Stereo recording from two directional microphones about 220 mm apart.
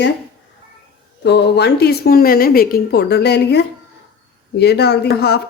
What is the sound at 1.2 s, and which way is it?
Speech, 50° left (ahead or behind).